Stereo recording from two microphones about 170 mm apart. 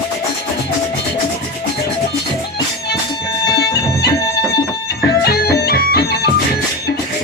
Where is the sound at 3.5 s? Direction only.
70° left (ahead or behind).